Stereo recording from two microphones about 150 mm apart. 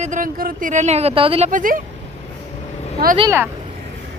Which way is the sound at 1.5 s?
65° right (ahead or behind).